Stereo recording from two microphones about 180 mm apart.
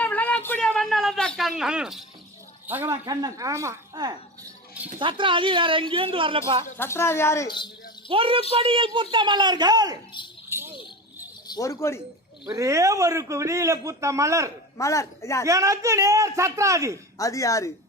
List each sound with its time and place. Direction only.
0.0 s a sound: 10° left (ahead or behind)
2.6 s a man's voice: 10° right (ahead or behind); by 6.7 s 30° right (ahead or behind)
6.7 s speech: 15° left (ahead or behind)
8.1 s a man's voice: 30° right (ahead or behind)
10.5 s a sound: 15° right (ahead or behind)
11.4 s speech: 20° left (ahead or behind)
12.5 s a man's voice: 20° right (ahead or behind)
14.8 s speech: 15° left (ahead or behind)
15.4 s a man's voice: 20° right (ahead or behind)
17.2 s speech: 20° left (ahead or behind)